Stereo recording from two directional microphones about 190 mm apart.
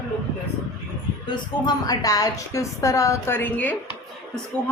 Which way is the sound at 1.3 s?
20° left (ahead or behind).